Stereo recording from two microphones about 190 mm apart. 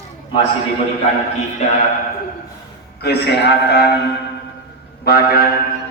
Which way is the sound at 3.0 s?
60° left (ahead or behind).